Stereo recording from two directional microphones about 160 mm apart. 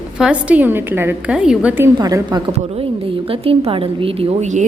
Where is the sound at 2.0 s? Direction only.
25° right (ahead or behind).